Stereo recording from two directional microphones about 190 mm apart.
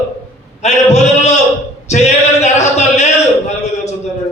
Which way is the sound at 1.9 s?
35° left (ahead or behind).